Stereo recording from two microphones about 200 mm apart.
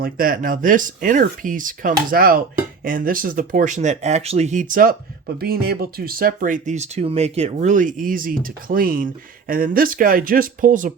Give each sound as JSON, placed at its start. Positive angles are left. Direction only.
{"t": 0.0, "sound": "speech", "side_deg": -45}